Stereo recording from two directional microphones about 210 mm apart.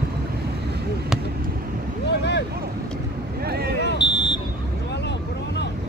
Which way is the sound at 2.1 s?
55° left (ahead or behind).